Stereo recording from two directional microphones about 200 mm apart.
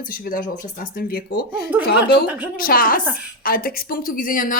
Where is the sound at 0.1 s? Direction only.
45° left (ahead or behind).